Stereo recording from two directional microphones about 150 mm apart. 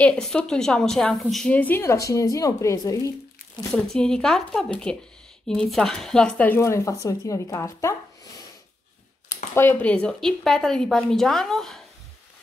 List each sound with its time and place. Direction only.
0.0 s a woman's voice: 5° left (ahead or behind); by 3.1 s 20° left (ahead or behind)
3.7 s a woman's voice: 5° left (ahead or behind); by 7.9 s 20° left (ahead or behind)
9.3 s speech: 15° left (ahead or behind)